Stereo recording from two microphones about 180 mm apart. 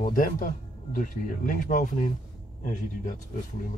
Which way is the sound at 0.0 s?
50° left (ahead or behind).